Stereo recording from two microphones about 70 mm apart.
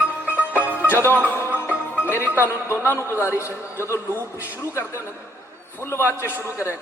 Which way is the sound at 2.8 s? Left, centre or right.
Left.